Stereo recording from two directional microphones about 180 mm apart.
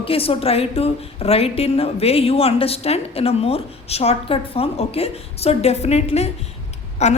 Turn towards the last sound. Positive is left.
turn(degrees=40)  # may be behind; listen again after turning